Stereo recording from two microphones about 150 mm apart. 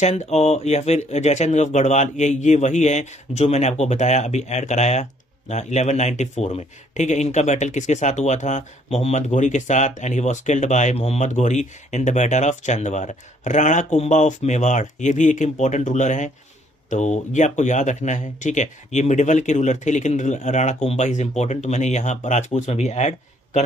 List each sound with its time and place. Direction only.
0.0 s speech: 45° left (ahead or behind)